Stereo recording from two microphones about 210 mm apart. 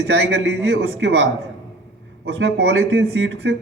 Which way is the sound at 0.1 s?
65° right (ahead or behind).